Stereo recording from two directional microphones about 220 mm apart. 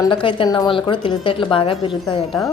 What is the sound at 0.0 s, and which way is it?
A woman's voice, 20° left (ahead or behind).